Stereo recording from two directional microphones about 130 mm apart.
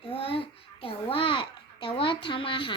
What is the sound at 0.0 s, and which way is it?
Babbling, 45° left (ahead or behind).